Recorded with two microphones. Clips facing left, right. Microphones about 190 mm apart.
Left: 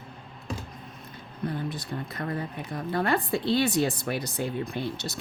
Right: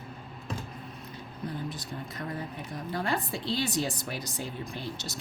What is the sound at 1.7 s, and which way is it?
A woman's voice, 60° left (ahead or behind).